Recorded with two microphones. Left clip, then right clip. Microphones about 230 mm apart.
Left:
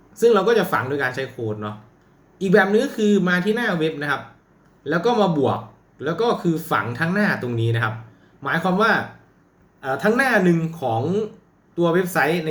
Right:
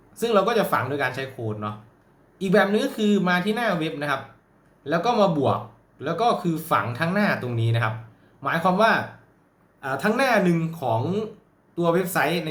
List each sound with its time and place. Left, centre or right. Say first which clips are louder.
0.1 s speech: left 5 dB; centre